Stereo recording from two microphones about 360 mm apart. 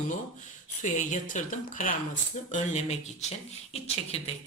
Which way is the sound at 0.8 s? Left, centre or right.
Centre.